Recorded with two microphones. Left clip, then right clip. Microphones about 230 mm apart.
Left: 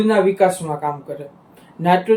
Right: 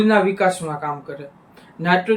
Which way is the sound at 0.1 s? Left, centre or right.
Centre.